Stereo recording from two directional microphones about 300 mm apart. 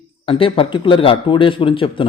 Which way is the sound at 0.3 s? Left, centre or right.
Centre.